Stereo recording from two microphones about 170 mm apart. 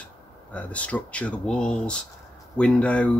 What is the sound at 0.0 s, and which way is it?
Speech, 10° left (ahead or behind).